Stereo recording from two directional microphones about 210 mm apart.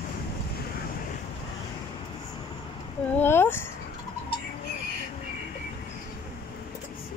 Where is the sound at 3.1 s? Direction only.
10° left (ahead or behind).